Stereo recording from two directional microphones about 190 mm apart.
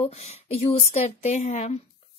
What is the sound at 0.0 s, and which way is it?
A woman's voice, 35° left (ahead or behind).